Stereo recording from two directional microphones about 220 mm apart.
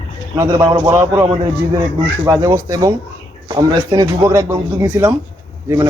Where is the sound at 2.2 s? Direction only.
15° right (ahead or behind).